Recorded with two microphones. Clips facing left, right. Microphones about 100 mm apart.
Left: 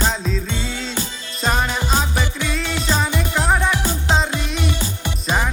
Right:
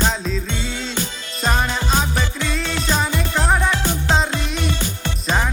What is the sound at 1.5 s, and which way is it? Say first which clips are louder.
Music: even; 5° left (ahead or behind).